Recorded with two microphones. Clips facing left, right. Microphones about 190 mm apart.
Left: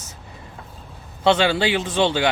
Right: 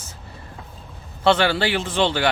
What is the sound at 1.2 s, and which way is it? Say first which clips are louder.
Speech: left 1 dB; 20° left (ahead or behind).